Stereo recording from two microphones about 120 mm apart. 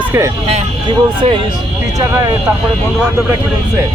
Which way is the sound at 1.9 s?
30° right (ahead or behind).